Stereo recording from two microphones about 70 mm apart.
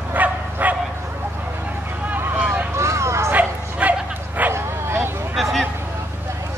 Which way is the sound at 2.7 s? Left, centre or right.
Right.